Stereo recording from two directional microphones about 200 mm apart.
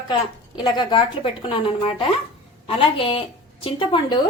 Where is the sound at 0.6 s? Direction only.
20° left (ahead or behind).